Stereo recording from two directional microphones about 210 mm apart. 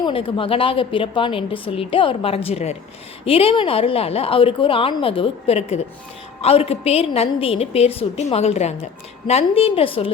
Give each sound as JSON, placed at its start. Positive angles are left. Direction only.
{"t": 0.0, "sound": "a woman's voice", "side_deg": 25}